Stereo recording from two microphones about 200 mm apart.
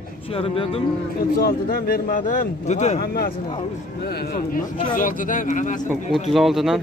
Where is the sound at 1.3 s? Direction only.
50° left (ahead or behind).